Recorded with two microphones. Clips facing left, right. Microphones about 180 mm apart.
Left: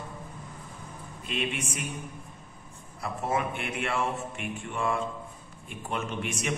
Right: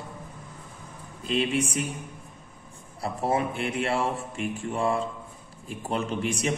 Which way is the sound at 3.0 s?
35° right (ahead or behind).